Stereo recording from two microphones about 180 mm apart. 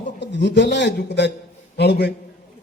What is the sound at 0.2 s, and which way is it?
A man's voice, 75° left (ahead or behind).